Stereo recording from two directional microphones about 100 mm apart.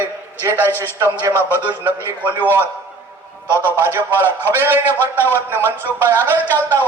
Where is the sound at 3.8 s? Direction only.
25° right (ahead or behind).